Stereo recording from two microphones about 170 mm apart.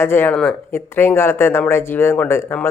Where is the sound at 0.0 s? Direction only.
15° left (ahead or behind).